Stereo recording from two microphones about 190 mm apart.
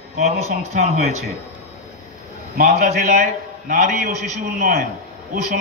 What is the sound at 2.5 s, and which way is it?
A man's voice, 50° right (ahead or behind).